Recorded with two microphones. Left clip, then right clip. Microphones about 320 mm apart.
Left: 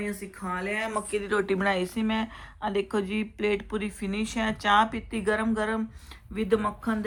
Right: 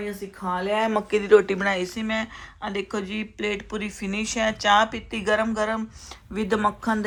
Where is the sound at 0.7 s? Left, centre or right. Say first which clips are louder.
Right 9 dB; centre.